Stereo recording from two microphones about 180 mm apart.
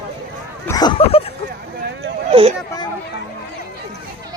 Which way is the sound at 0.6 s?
20° left (ahead or behind).